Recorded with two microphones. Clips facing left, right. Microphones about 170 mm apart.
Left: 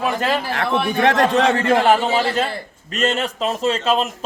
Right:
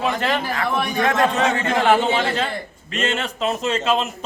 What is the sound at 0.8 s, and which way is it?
Speech, 30° left (ahead or behind).